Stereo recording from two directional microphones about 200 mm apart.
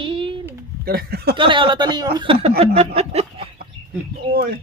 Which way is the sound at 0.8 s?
50° right (ahead or behind).